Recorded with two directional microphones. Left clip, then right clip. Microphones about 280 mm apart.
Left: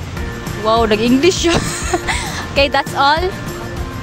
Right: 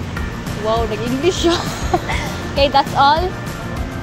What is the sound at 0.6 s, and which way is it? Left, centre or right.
Speech, left.